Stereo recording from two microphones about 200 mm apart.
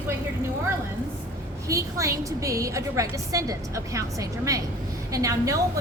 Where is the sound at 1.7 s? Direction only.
15° right (ahead or behind).